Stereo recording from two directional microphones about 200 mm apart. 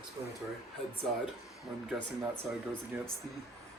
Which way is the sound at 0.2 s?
15° right (ahead or behind).